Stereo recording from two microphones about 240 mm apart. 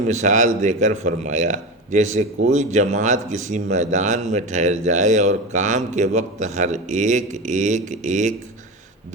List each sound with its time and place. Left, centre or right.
0.1 s speech: right